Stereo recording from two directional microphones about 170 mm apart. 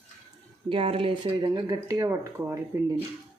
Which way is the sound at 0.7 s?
35° right (ahead or behind).